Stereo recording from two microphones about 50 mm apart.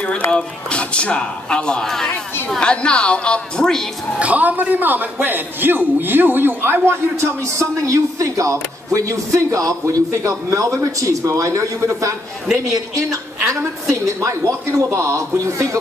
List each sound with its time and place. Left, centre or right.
0.3 s speech: centre
4.2 s a man's voice: right
13.5 s a woman's voice: right